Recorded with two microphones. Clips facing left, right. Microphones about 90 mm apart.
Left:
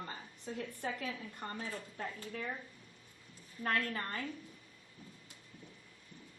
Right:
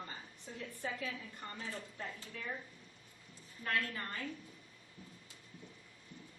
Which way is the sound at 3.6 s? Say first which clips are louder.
Left 3 dB; 45° left (ahead or behind).